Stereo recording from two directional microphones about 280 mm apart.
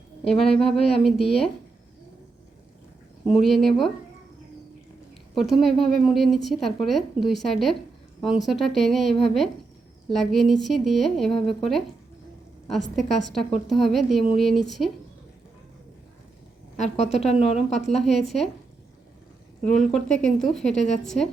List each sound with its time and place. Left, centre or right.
0.5 s a woman's voice: centre
3.2 s a woman's voice: centre
5.3 s a woman's voice: centre
16.8 s a woman's voice: left
17.8 s a woman's voice: centre
19.6 s a woman's voice: centre